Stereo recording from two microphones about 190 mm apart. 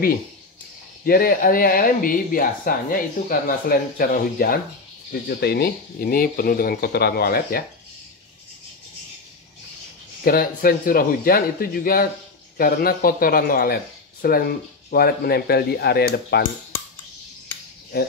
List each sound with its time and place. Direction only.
1.0 s speech: 50° left (ahead or behind)
10.2 s speech: 50° left (ahead or behind)
17.9 s speech: 55° left (ahead or behind)